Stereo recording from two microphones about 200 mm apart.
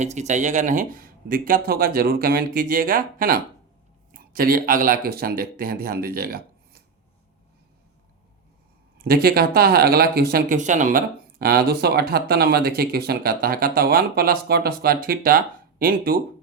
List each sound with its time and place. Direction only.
0.0 s speech: 35° right (ahead or behind)
9.0 s speech: 50° right (ahead or behind)